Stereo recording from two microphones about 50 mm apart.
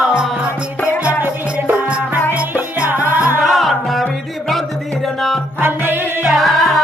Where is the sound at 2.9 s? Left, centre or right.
Right.